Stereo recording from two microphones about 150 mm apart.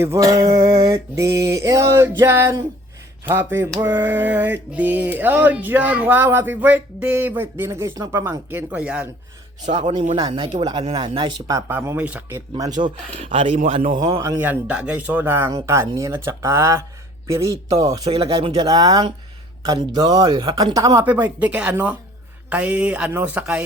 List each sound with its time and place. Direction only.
0.0 s male singing: 20° right (ahead or behind)
3.2 s music: 15° right (ahead or behind)
9.7 s male singing: 30° right (ahead or behind)
10.8 s speech: 40° right (ahead or behind)
11.7 s music: 15° right (ahead or behind)
12.8 s speech: 35° right (ahead or behind)
13.8 s speech: 55° right (ahead or behind)
14.4 s music: 10° right (ahead or behind)
17.2 s male singing: 20° right (ahead or behind)
18.1 s male singing: 35° right (ahead or behind)
21.0 s music: 10° right (ahead or behind)